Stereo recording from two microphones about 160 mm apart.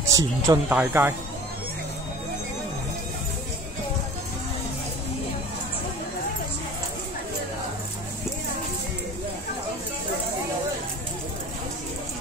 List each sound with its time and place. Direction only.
0.1 s speech: 20° right (ahead or behind)